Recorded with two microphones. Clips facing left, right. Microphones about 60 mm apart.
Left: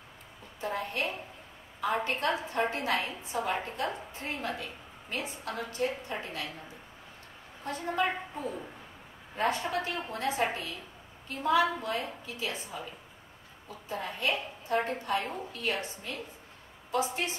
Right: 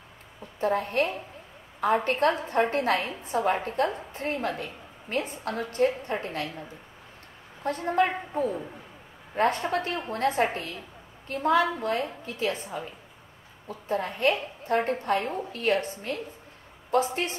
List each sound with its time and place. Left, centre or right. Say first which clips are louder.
0.6 s a woman's voice: right 8 dB; right
7.6 s a woman's voice: right 6 dB; right